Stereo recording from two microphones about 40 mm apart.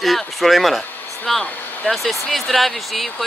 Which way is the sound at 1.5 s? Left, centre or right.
Left.